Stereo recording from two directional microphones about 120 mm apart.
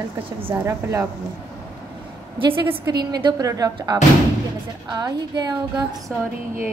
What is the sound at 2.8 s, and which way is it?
A woman's voice, 35° right (ahead or behind).